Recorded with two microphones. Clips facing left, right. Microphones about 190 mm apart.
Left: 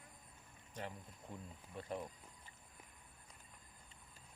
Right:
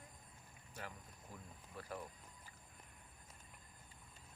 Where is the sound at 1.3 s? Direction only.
25° left (ahead or behind).